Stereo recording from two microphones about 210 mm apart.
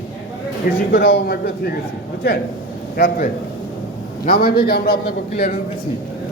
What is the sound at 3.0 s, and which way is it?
A man's voice, 50° left (ahead or behind).